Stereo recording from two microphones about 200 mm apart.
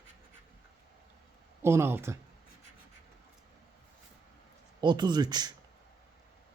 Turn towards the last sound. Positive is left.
turn(degrees=-20)  # may be behind; listen again after turning